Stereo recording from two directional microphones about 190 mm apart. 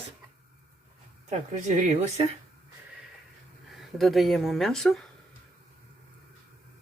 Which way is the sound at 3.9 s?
Centre (ahead or behind).